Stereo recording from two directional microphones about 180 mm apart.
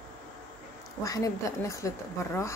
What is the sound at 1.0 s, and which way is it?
Speech, 20° left (ahead or behind).